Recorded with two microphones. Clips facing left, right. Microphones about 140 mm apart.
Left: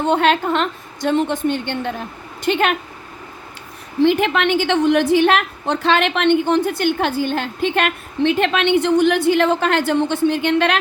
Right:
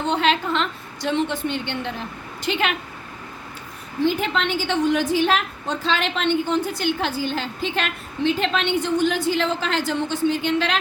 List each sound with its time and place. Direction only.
0.0 s a woman's voice: 50° left (ahead or behind)
4.0 s a woman's voice: 70° left (ahead or behind)